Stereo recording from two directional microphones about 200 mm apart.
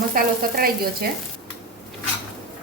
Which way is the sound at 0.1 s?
50° right (ahead or behind).